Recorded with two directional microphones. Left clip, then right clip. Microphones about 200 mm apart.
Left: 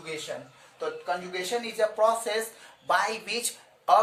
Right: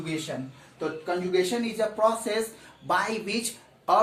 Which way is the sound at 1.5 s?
30° left (ahead or behind).